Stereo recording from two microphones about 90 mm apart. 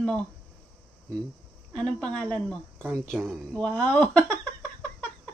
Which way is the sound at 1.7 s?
10° left (ahead or behind).